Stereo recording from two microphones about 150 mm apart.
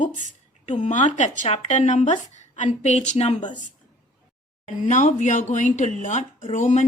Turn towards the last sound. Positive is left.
turn(degrees=55)  # may be behind; listen again after turning